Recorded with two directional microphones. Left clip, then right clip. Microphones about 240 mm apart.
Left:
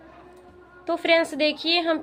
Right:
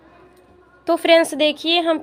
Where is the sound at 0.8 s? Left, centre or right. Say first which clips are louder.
Right 6 dB; right.